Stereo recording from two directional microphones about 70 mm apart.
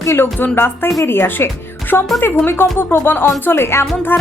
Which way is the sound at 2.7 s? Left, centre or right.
Left.